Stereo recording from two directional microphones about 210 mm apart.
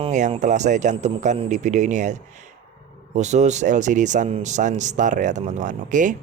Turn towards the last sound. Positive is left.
turn(degrees=-35)  # may be behind; listen again after turning